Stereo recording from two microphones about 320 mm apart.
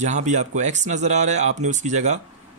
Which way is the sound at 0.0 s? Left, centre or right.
Right.